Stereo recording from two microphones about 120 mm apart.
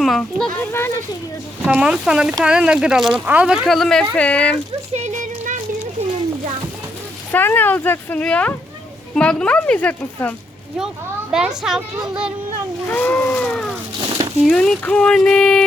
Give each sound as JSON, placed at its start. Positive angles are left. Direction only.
{"t": 0.0, "sound": "a child's voice", "side_deg": 0}
{"t": 0.6, "sound": "speech", "side_deg": 20}
{"t": 1.6, "sound": "a child's voice", "side_deg": -10}
{"t": 4.9, "sound": "a sound", "side_deg": -80}
{"t": 7.3, "sound": "speech", "side_deg": 15}
{"t": 10.8, "sound": "a child's voice", "side_deg": -5}
{"t": 12.9, "sound": "a child's voice", "side_deg": 15}